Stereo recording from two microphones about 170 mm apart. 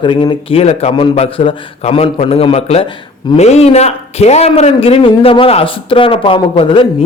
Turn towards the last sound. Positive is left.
turn(degrees=30)  # may be behind; listen again after turning